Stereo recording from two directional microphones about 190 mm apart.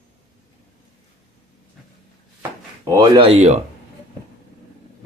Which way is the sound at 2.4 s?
15° right (ahead or behind).